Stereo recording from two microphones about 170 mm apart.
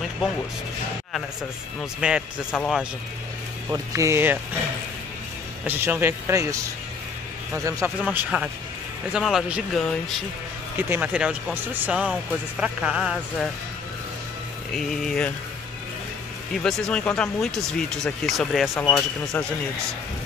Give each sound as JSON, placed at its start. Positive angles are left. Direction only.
{"t": 1.8, "sound": "speech", "side_deg": -5}
{"t": 3.7, "sound": "speech", "side_deg": -15}
{"t": 5.7, "sound": "speech", "side_deg": -15}
{"t": 14.7, "sound": "speech", "side_deg": 0}
{"t": 16.6, "sound": "speech", "side_deg": 5}
{"t": 18.8, "sound": "speech", "side_deg": 10}